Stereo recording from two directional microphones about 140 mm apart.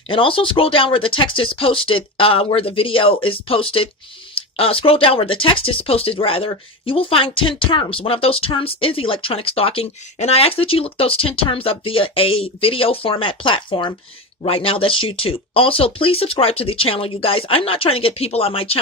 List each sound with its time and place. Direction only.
0.1 s speech: 40° left (ahead or behind)